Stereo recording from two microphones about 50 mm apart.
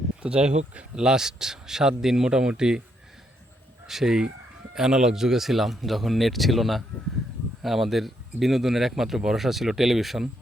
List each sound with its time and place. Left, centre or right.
0.2 s speech: centre
3.8 s a man's voice: centre